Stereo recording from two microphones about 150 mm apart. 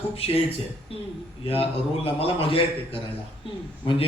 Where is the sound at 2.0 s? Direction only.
35° left (ahead or behind).